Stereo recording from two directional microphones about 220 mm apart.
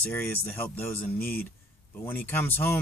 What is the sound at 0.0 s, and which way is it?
Speech, 10° left (ahead or behind).